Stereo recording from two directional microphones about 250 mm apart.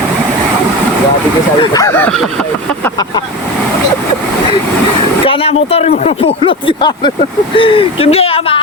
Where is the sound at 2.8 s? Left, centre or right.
Centre.